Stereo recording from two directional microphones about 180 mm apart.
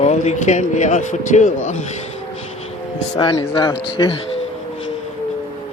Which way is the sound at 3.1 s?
25° left (ahead or behind).